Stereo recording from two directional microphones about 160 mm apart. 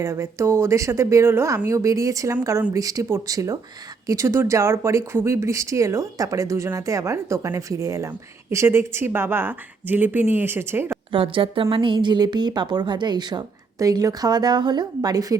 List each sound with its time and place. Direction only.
0.0 s a woman's voice: 20° right (ahead or behind)
11.1 s a woman's voice: 30° right (ahead or behind)